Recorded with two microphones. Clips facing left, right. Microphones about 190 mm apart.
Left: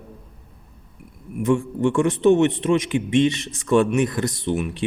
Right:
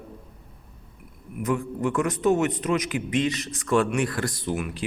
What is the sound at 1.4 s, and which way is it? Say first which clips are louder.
A man's voice: left 6 dB; 25° left (ahead or behind).